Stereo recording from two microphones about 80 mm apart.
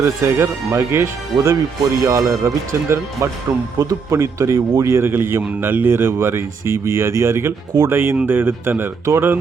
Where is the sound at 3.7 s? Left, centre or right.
Right.